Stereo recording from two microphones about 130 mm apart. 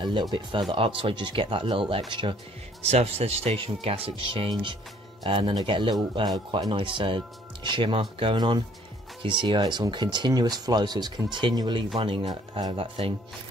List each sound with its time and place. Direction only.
0.0 s speech: 35° right (ahead or behind)
2.8 s speech: 50° right (ahead or behind); by 12.8 s 35° right (ahead or behind)